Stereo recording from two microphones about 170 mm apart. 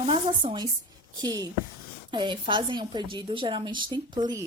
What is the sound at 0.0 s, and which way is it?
A woman's voice, 30° right (ahead or behind).